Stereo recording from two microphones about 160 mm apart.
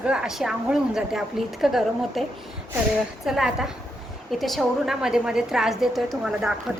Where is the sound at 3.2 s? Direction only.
5° right (ahead or behind).